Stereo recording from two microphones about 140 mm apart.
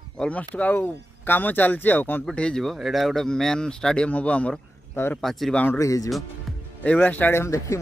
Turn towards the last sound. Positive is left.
turn(degrees=20)  # may be behind; listen again after turning